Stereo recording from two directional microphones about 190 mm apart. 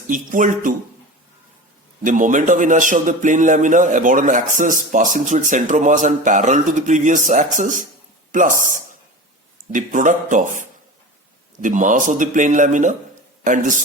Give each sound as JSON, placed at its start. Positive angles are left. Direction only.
{"t": 0.1, "sound": "speech", "side_deg": -45}
{"t": 2.0, "sound": "a man's voice", "side_deg": -45}